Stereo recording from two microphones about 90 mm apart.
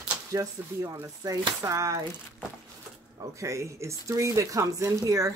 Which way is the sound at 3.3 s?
35° right (ahead or behind).